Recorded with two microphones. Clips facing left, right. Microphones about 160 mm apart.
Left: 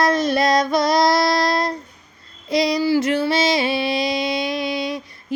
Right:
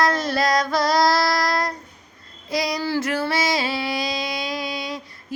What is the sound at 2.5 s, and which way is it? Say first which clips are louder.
Child singing: left 6 dB; 20° left (ahead or behind).